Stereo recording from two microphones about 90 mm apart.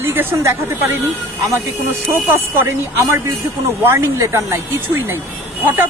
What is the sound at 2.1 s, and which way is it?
Speech, 25° right (ahead or behind).